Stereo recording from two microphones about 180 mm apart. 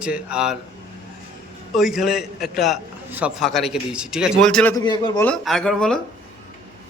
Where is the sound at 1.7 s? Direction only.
Centre (ahead or behind).